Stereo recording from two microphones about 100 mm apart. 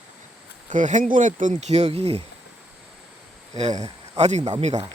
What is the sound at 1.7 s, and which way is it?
Speech, 90° right.